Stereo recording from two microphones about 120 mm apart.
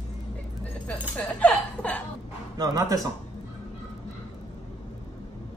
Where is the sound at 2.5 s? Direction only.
30° right (ahead or behind).